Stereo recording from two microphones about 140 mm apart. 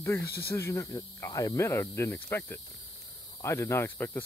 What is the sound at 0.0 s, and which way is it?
Speech, 20° left (ahead or behind).